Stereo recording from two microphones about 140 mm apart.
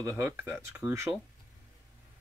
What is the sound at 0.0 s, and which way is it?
Speech, 20° right (ahead or behind).